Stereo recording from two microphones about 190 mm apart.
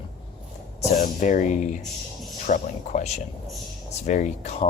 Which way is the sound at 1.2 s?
40° left (ahead or behind).